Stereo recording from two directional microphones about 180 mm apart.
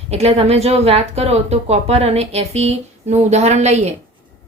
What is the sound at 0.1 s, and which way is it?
Speech, 35° right (ahead or behind).